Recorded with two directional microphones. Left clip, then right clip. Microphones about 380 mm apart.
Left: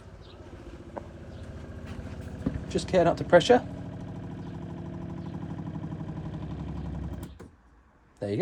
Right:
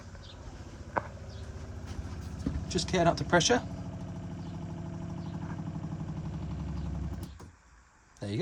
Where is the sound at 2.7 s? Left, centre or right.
Centre.